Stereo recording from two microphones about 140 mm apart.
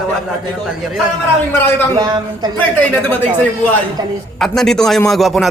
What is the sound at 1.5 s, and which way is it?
Speech, 15° left (ahead or behind).